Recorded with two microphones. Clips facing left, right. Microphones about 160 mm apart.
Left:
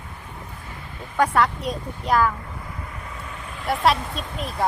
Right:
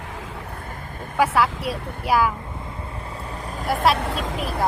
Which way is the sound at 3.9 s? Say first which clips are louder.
Right 6 dB; 75° right (ahead or behind).